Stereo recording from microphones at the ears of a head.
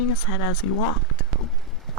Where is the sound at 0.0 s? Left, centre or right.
Left.